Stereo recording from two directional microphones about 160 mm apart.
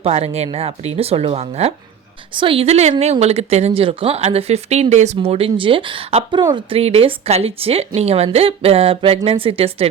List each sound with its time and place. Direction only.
0.0 s speech: 40° right (ahead or behind)